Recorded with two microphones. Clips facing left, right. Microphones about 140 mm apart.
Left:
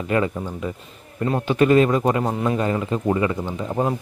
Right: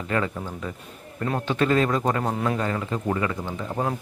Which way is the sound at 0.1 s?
15° left (ahead or behind).